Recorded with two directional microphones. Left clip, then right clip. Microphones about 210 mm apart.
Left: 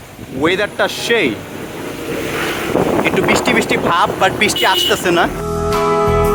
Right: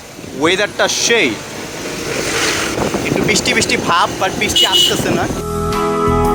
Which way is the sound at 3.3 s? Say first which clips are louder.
Right 2 dB; 10° left (ahead or behind).